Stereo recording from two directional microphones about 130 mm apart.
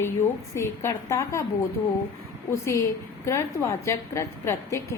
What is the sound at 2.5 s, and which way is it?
A woman's voice, 20° left (ahead or behind).